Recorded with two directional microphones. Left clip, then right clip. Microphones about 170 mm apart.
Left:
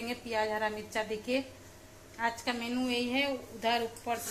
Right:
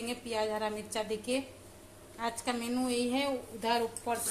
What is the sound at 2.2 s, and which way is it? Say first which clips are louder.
A woman's voice: left 2 dB; 15° right (ahead or behind).